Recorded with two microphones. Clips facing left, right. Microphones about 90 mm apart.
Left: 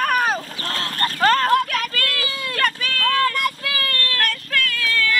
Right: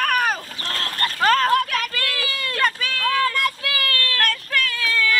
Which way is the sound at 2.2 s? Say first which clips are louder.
Even; 10° left (ahead or behind).